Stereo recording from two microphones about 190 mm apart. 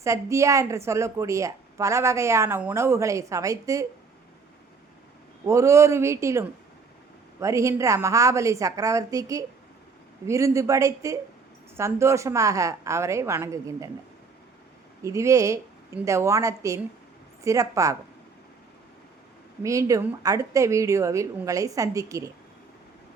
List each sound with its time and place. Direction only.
0.0 s a woman's voice: 15° right (ahead or behind)
5.5 s a woman's voice: 15° right (ahead or behind)
15.0 s a woman's voice: 15° right (ahead or behind)
19.6 s a woman's voice: 15° right (ahead or behind)